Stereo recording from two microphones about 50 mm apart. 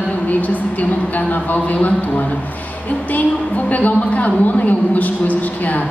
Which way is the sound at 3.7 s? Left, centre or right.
Left.